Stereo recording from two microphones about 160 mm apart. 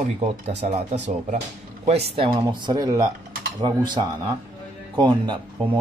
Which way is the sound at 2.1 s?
30° right (ahead or behind).